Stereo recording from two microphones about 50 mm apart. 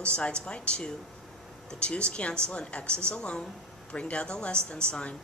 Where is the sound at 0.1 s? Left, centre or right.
Left.